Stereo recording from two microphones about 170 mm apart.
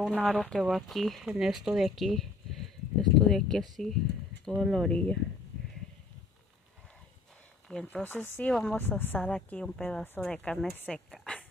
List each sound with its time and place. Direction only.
0.0 s speech: centre (ahead or behind)
7.6 s speech: 5° left (ahead or behind)